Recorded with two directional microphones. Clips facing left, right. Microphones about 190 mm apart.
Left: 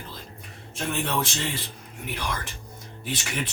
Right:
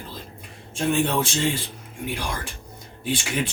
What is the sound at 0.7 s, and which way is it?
Speech, 30° right (ahead or behind).